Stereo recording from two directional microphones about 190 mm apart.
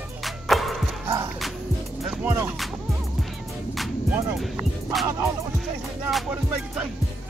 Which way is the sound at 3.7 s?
Centre (ahead or behind).